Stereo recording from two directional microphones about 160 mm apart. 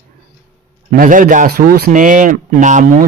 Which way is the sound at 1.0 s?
60° right (ahead or behind).